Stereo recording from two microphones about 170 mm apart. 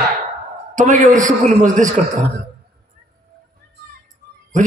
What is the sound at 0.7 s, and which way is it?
A man's voice, 50° right (ahead or behind).